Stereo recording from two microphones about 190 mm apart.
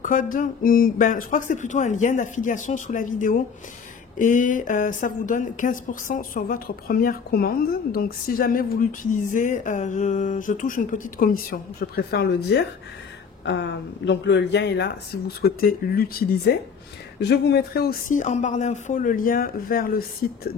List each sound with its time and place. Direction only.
0.0 s speech: 45° left (ahead or behind)